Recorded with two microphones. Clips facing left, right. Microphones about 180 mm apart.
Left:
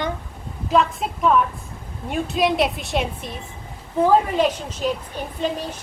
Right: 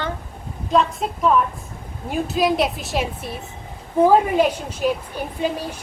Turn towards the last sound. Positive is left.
turn(degrees=-10)  # may be behind; listen again after turning